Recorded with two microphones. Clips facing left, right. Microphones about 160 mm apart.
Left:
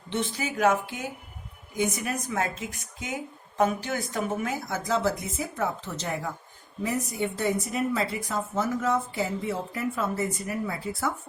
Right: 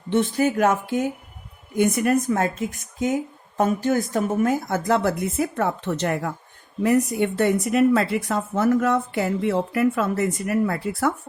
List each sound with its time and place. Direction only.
0.1 s a woman's voice: 55° right (ahead or behind); by 11.1 s 70° right (ahead or behind)